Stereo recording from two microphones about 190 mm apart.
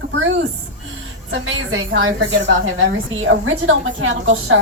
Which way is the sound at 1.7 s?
85° right.